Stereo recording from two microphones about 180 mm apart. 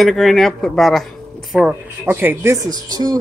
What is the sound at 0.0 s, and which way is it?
A woman's voice, centre (ahead or behind).